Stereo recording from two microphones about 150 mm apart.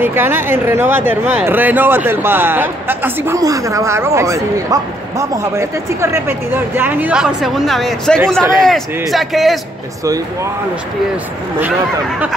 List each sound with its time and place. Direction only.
0.0 s speech: 15° right (ahead or behind)
10.0 s speech: 20° right (ahead or behind)